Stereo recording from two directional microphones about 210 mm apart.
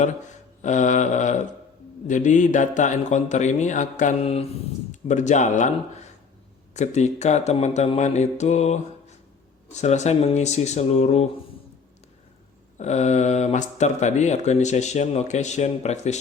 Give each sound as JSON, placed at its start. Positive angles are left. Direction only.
{"t": 0.6, "sound": "speech", "side_deg": 35}
{"t": 6.7, "sound": "speech", "side_deg": 35}
{"t": 12.7, "sound": "speech", "side_deg": 35}